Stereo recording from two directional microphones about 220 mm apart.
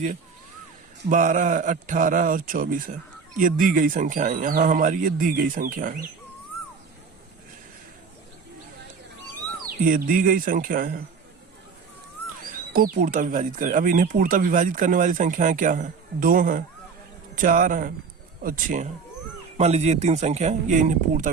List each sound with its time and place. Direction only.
1.1 s speech: 35° right (ahead or behind)
9.6 s speech: 40° right (ahead or behind)
12.7 s speech: 40° right (ahead or behind)